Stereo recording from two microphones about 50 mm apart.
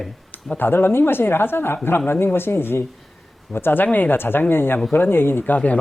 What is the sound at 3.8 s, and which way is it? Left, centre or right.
Speech, left.